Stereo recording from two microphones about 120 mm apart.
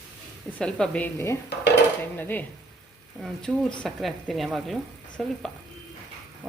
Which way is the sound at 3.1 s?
Centre (ahead or behind).